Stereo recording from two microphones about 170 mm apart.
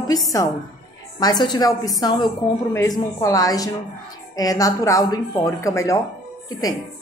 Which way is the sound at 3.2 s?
20° left (ahead or behind).